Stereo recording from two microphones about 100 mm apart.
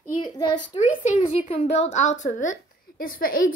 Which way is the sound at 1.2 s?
75° left (ahead or behind).